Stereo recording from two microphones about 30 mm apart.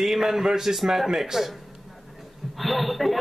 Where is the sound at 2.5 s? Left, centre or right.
Centre.